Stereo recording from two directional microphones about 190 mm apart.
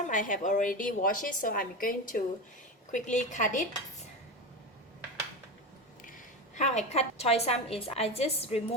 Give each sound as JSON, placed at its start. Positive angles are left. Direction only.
{"t": 0.1, "sound": "a woman's voice", "side_deg": 45}
{"t": 6.6, "sound": "a woman's voice", "side_deg": 35}